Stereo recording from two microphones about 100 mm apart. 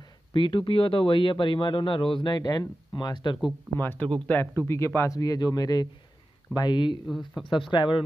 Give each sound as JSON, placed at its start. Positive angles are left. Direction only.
{"t": 0.3, "sound": "speech", "side_deg": 55}
{"t": 2.3, "sound": "speech", "side_deg": 40}
{"t": 3.7, "sound": "speech", "side_deg": 20}
{"t": 7.1, "sound": "speech", "side_deg": 0}
{"t": 7.5, "sound": "speech", "side_deg": 55}